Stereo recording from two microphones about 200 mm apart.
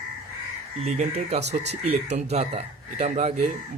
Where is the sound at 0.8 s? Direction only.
30° right (ahead or behind).